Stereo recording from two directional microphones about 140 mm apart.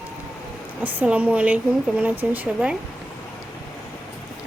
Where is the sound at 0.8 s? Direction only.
10° right (ahead or behind).